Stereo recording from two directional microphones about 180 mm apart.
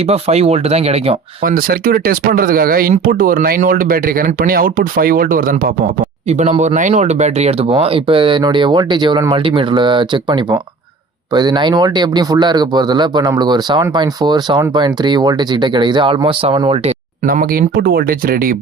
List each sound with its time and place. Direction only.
0.1 s speech: 35° right (ahead or behind)
1.5 s speech: 55° right (ahead or behind)
6.2 s speech: 40° right (ahead or behind)
17.2 s speech: 55° right (ahead or behind)